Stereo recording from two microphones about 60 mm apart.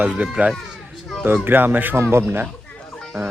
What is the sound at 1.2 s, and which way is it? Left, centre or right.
Speech, right.